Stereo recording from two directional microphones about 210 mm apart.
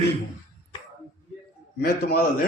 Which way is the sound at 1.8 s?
45° left (ahead or behind).